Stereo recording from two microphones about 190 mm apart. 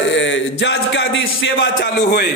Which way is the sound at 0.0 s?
70° left (ahead or behind).